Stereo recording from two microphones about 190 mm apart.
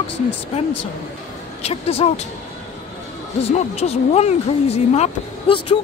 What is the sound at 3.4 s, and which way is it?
Speech, 35° left (ahead or behind).